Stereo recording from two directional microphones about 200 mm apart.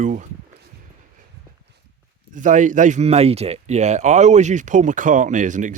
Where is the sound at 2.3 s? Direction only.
40° right (ahead or behind).